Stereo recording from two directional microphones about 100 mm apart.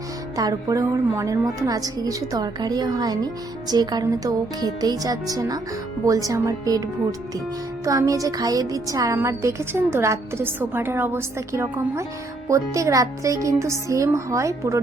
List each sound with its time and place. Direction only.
0.3 s a woman's voice: 35° right (ahead or behind)
7.9 s a woman's voice: 35° right (ahead or behind)